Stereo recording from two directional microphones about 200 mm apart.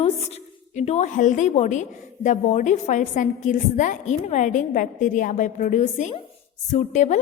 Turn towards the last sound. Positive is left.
turn(degrees=40)  # may be behind; listen again after turning